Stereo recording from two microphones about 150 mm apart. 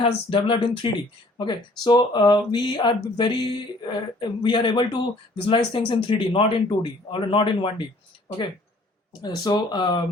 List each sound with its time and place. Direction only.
0.3 s a man's voice: 35° left (ahead or behind)
9.2 s speech: 30° left (ahead or behind)